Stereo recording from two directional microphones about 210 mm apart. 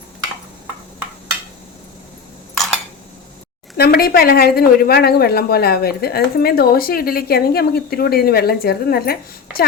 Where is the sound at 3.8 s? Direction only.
45° left (ahead or behind).